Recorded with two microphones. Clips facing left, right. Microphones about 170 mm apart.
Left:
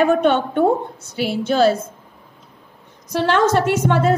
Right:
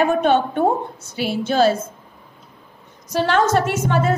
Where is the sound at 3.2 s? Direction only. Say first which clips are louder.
Left 1 dB; 65° left (ahead or behind).